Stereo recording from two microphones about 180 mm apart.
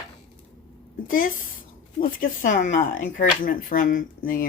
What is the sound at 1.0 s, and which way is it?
Speech, 50° left (ahead or behind).